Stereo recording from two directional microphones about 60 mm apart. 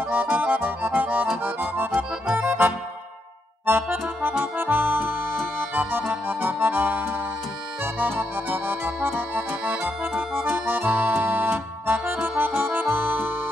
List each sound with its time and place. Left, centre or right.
0.1 s accordion: right
10.1 s accordion: centre
10.7 s accordion: right